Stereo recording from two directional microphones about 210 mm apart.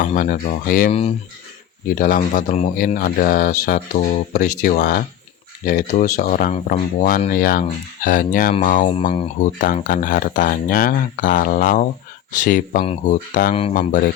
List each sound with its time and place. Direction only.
0.0 s speech: 40° left (ahead or behind)
2.0 s speech: 40° left (ahead or behind)